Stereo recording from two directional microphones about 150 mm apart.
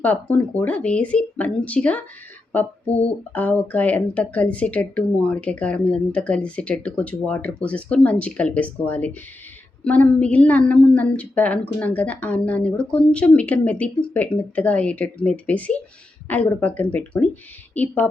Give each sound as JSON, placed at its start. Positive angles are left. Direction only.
{"t": 0.0, "sound": "speech", "side_deg": 10}
{"t": 2.8, "sound": "speech", "side_deg": 45}
{"t": 3.3, "sound": "speech", "side_deg": 10}